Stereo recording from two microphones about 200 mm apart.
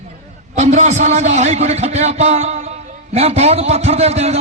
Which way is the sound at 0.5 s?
35° right (ahead or behind).